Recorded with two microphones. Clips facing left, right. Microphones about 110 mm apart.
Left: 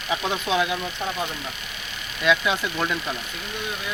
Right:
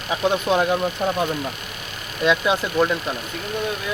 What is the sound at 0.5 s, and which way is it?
Speech, 45° right (ahead or behind).